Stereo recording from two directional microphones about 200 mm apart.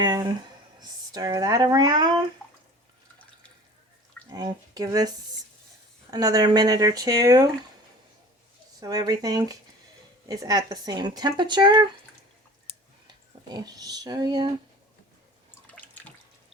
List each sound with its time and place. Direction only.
0.0 s speech: 20° right (ahead or behind)
4.3 s speech: 20° right (ahead or behind)
8.8 s speech: 20° right (ahead or behind)
13.1 s speech: 20° right (ahead or behind)
15.7 s water: 5° left (ahead or behind)